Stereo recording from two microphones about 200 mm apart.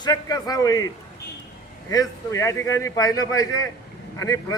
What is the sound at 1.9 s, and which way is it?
A man's voice, 15° left (ahead or behind).